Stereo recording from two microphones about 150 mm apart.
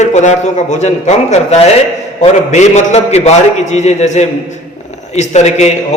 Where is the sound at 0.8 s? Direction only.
50° left (ahead or behind).